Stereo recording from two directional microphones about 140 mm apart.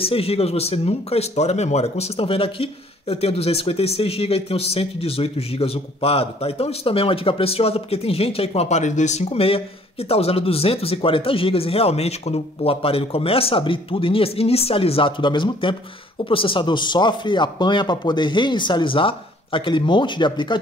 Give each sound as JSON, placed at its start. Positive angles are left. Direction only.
{"t": 0.0, "sound": "speech", "side_deg": 45}